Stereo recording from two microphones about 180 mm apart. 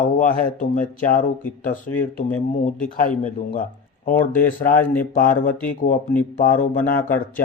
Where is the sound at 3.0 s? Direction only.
45° left (ahead or behind).